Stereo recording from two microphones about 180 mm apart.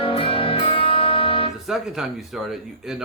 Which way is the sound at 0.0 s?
30° left (ahead or behind).